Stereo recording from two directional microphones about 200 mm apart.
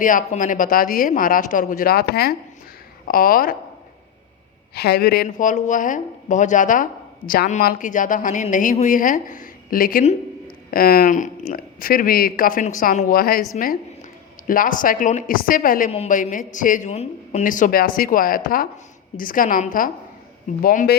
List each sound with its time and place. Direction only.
0.0 s speech: 40° left (ahead or behind)
4.7 s speech: 55° left (ahead or behind)
14.4 s speech: 45° left (ahead or behind)